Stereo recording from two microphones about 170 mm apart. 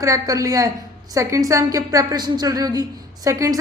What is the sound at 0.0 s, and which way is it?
A woman's voice, 20° right (ahead or behind).